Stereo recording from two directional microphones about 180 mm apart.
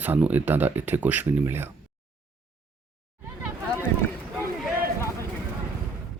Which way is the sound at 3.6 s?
10° left (ahead or behind).